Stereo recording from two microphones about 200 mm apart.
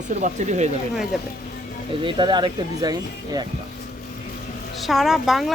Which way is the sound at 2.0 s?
25° right (ahead or behind).